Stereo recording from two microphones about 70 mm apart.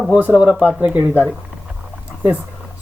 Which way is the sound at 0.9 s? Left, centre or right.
Right.